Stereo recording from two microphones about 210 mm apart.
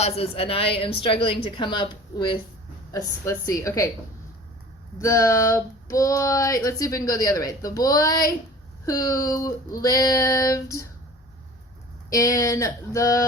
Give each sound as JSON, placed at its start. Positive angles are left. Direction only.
{"t": 0.0, "sound": "a woman's voice", "side_deg": 30}
{"t": 4.9, "sound": "speech", "side_deg": 15}
{"t": 12.1, "sound": "speech", "side_deg": 15}